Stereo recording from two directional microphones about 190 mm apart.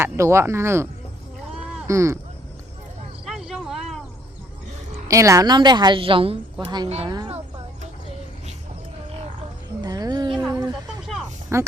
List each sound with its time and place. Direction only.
0.0 s speech: 15° right (ahead or behind)
1.9 s speech: 15° right (ahead or behind)
3.2 s a sound: centre (ahead or behind)
5.0 s a woman's voice: 15° right (ahead or behind)
9.8 s music: 20° right (ahead or behind)
11.5 s speech: 15° right (ahead or behind)